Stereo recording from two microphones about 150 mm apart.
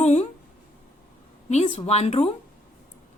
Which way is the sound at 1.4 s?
45° left (ahead or behind).